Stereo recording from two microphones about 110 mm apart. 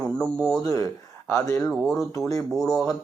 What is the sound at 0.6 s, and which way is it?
Speech, 30° left (ahead or behind).